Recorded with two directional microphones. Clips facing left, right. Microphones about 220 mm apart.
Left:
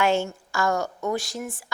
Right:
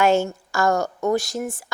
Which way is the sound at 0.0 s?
40° right (ahead or behind).